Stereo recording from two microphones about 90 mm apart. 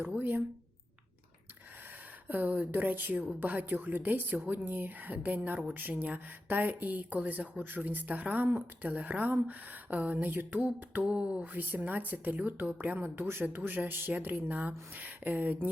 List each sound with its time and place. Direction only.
0.0 s speech: 20° right (ahead or behind)
2.2 s speech: 20° right (ahead or behind)